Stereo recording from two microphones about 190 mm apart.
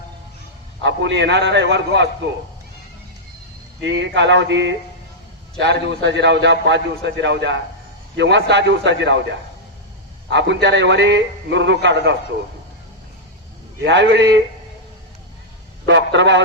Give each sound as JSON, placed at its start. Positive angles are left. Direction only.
{"t": 0.8, "sound": "a man's voice", "side_deg": -70}
{"t": 3.8, "sound": "a man's voice", "side_deg": -70}
{"t": 10.2, "sound": "a man's voice", "side_deg": -65}
{"t": 13.8, "sound": "a man's voice", "side_deg": -65}
{"t": 15.9, "sound": "a man's voice", "side_deg": -70}